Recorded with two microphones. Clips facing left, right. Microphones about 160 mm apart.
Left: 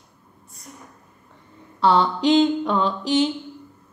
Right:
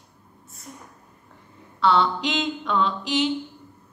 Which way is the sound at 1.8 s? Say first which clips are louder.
Left 3 dB; 35° left (ahead or behind).